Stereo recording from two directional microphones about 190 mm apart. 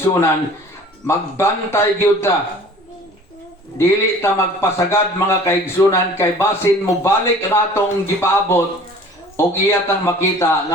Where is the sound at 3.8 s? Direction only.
15° left (ahead or behind).